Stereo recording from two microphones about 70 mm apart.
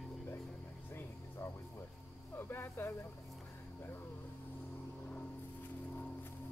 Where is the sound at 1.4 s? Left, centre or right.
Left.